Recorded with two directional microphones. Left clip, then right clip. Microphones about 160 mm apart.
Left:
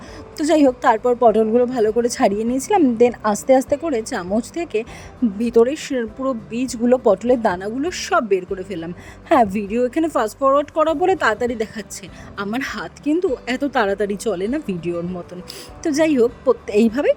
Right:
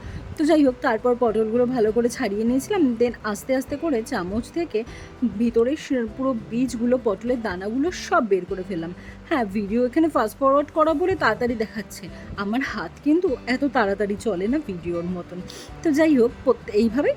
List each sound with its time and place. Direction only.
0.3 s a woman's voice: 25° left (ahead or behind)